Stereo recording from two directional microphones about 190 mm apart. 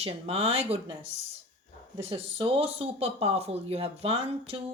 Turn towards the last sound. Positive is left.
turn(degrees=-30)  # may be behind; listen again after turning